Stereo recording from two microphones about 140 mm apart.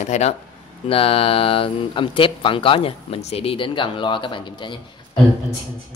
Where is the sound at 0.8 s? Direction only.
40° left (ahead or behind).